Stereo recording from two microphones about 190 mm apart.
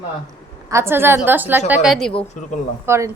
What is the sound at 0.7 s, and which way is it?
A woman's voice, 15° right (ahead or behind).